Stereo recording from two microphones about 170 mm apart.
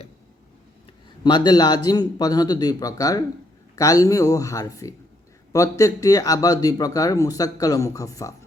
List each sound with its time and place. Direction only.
1.2 s speech: 25° left (ahead or behind)